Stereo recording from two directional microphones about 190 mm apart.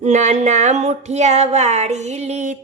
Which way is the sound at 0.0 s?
40° right (ahead or behind).